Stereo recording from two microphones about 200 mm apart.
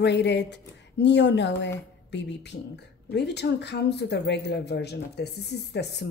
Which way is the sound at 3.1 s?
55° left (ahead or behind).